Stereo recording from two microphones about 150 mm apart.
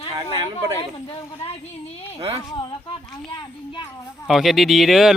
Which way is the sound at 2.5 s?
30° left (ahead or behind).